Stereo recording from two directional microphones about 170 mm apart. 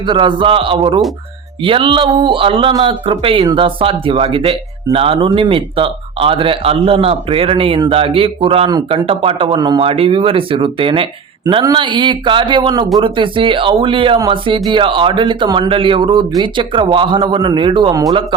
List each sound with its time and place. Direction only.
0.0 s speech: 30° right (ahead or behind)